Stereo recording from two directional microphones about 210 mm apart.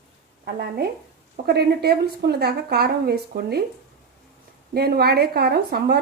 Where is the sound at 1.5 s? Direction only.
50° right (ahead or behind).